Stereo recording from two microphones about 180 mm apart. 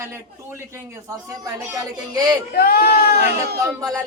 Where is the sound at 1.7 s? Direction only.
20° right (ahead or behind).